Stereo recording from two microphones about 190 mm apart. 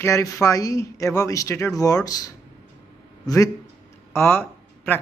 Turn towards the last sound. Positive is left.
turn(degrees=10)  # may be behind; listen again after turning